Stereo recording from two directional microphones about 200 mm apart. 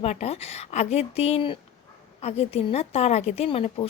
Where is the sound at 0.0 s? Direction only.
30° left (ahead or behind).